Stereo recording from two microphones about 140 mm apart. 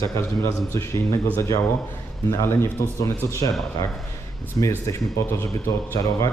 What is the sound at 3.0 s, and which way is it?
Speech, 25° left (ahead or behind).